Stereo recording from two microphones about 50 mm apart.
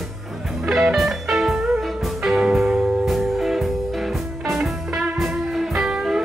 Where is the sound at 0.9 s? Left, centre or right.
Centre.